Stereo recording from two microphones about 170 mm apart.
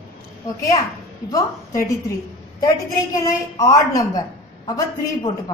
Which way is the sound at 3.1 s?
20° left (ahead or behind).